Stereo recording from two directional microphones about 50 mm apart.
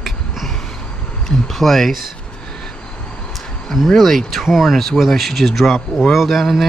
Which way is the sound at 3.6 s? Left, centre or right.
Centre.